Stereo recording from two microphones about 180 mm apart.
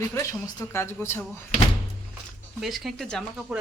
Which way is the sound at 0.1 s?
15° left (ahead or behind).